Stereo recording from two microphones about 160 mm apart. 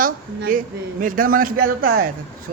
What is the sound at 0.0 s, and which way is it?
Speech, 60° right (ahead or behind).